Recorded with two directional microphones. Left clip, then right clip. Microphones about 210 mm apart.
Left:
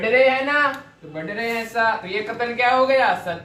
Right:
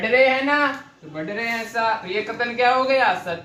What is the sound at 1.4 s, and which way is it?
Speech, 10° left (ahead or behind).